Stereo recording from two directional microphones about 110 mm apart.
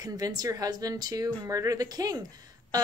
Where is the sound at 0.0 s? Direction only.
35° right (ahead or behind).